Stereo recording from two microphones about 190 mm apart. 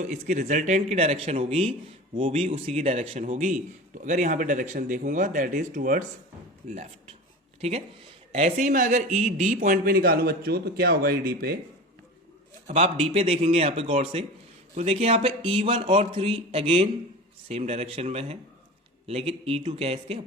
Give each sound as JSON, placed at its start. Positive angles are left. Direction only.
{"t": 0.0, "sound": "a man's voice", "side_deg": -40}
{"t": 6.7, "sound": "a man's voice", "side_deg": -35}
{"t": 8.3, "sound": "a man's voice", "side_deg": -35}
{"t": 12.6, "sound": "a man's voice", "side_deg": -35}